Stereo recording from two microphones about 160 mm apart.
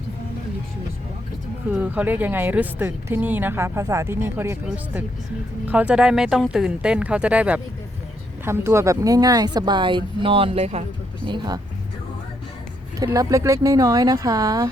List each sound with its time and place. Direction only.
1.7 s speech: 10° right (ahead or behind)
5.6 s speech: 5° right (ahead or behind); by 10.8 s 40° right (ahead or behind)
11.3 s speech: 25° right (ahead or behind)
13.0 s speech: 20° right (ahead or behind)